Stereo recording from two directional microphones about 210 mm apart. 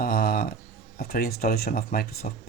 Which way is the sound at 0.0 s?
45° left (ahead or behind).